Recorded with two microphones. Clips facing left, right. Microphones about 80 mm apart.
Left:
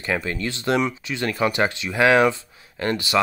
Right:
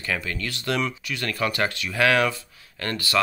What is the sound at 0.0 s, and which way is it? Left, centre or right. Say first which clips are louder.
Speech: left 4 dB; left.